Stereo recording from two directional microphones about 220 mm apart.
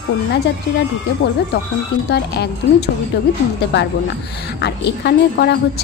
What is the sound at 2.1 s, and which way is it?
Speech, 50° left (ahead or behind).